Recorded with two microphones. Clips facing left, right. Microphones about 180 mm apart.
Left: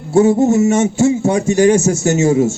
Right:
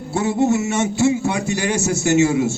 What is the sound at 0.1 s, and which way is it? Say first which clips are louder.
A man's voice: left 7 dB; 40° left (ahead or behind).